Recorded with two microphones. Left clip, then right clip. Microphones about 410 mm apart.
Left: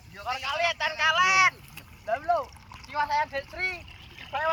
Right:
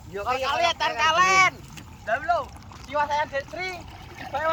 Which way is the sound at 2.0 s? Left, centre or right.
Left.